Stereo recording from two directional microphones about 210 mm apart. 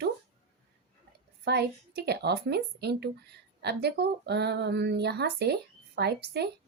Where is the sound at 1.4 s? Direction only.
50° right (ahead or behind).